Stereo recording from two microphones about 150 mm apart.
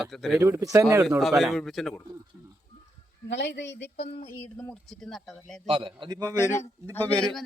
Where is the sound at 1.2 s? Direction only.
5° right (ahead or behind).